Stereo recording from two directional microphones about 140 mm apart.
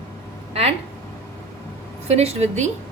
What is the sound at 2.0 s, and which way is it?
Speech, 50° right (ahead or behind).